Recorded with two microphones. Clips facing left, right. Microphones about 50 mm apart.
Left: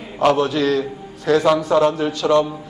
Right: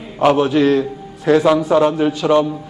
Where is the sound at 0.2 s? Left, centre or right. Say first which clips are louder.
Right 3 dB; centre.